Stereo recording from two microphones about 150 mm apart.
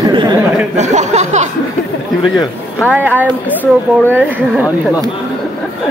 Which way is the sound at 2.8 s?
5° right (ahead or behind).